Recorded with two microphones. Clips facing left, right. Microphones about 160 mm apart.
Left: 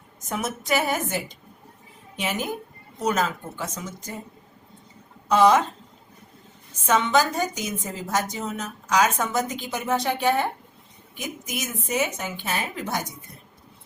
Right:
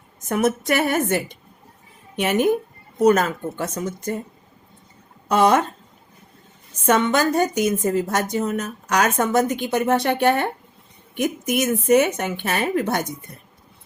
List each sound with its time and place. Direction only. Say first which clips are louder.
0.3 s a woman's voice: right 7 dB; 55° right (ahead or behind)
5.3 s a woman's voice: right 1 dB; 55° right (ahead or behind)
6.8 s a woman's voice: right 3 dB; 60° right (ahead or behind)